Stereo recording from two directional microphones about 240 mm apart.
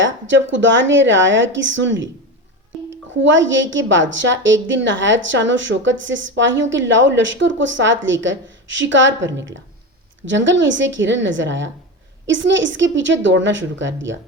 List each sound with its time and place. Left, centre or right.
0.0 s a woman's voice: right